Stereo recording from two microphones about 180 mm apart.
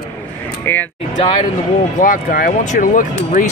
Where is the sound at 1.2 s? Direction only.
30° left (ahead or behind).